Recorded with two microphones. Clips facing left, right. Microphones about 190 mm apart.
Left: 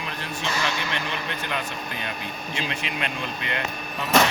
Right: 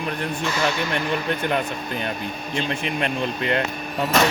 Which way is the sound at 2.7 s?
50° right (ahead or behind).